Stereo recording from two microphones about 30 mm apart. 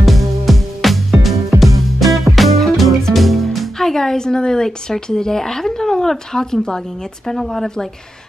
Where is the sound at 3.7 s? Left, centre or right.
Centre.